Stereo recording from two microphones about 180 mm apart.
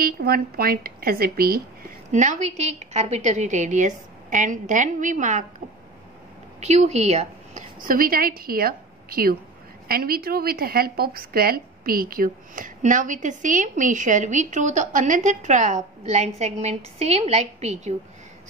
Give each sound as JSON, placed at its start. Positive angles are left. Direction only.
{"t": 0.0, "sound": "a woman's voice", "side_deg": -55}
{"t": 2.0, "sound": "a woman's voice", "side_deg": -40}
{"t": 6.6, "sound": "a woman's voice", "side_deg": -40}